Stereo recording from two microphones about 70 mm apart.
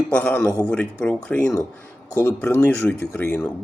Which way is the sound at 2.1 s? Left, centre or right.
Left.